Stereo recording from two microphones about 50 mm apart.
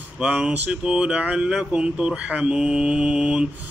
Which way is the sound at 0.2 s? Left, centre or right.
Right.